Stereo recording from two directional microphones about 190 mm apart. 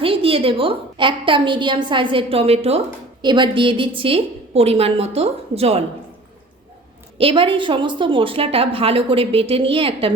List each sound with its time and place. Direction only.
0.0 s a woman's voice: 30° right (ahead or behind)
7.2 s a woman's voice: 30° right (ahead or behind)